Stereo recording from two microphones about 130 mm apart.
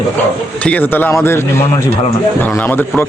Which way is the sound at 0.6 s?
15° left (ahead or behind).